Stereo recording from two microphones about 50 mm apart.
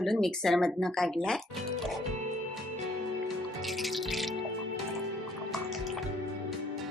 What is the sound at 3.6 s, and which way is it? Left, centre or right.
Music, centre.